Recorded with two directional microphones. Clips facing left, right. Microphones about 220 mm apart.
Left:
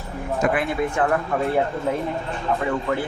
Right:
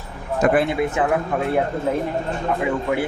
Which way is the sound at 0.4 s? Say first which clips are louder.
Right 5 dB; 50° right (ahead or behind).